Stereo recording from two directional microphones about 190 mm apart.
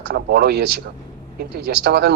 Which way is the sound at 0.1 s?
55° right (ahead or behind).